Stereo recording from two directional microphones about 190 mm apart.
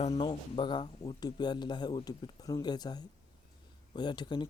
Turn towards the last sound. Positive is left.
turn(degrees=25)  # may be behind; listen again after turning